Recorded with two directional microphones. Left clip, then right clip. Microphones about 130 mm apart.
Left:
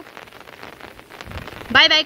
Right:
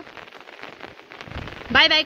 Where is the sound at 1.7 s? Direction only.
25° left (ahead or behind).